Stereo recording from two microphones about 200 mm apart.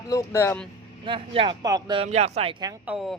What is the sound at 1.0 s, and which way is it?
Speech, 25° right (ahead or behind).